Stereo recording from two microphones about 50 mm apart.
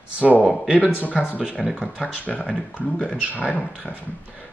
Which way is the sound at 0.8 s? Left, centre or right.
Left.